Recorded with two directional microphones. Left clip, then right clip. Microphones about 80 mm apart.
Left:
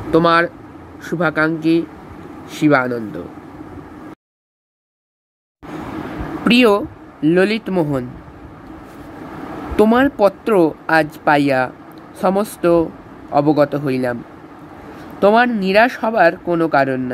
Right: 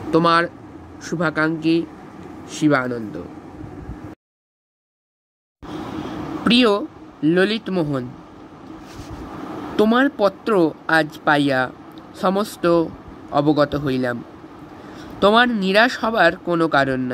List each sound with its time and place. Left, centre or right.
0.1 s a man's voice: centre
6.4 s speech: left
9.8 s a man's voice: left; by 14.1 s centre
15.1 s speech: centre